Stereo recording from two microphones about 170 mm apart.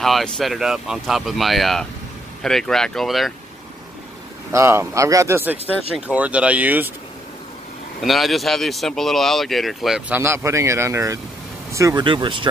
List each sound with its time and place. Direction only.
0.0 s speech: centre (ahead or behind)
4.5 s speech: 15° right (ahead or behind)
8.0 s speech: centre (ahead or behind); by 12.4 s 30° right (ahead or behind)